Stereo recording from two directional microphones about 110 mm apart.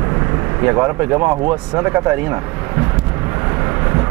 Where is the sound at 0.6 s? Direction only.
25° right (ahead or behind).